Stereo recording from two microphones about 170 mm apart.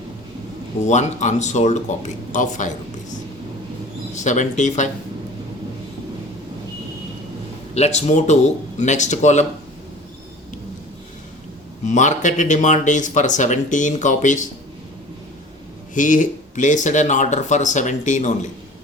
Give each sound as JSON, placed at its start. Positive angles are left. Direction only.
{"t": 0.9, "sound": "speech", "side_deg": 45}
{"t": 4.1, "sound": "speech", "side_deg": 45}
{"t": 7.8, "sound": "speech", "side_deg": 40}
{"t": 11.9, "sound": "speech", "side_deg": 45}
{"t": 16.0, "sound": "speech", "side_deg": 50}